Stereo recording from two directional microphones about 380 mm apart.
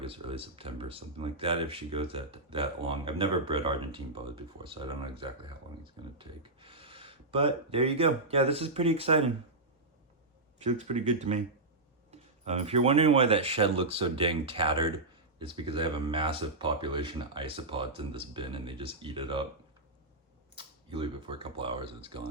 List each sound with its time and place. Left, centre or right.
0.0 s speech: centre
10.6 s speech: centre
12.5 s speech: centre
20.6 s speech: centre